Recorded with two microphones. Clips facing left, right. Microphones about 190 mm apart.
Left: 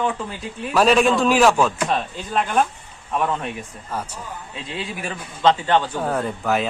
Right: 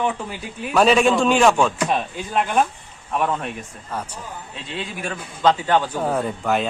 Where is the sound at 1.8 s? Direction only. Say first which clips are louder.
Right 1 dB; 10° right (ahead or behind).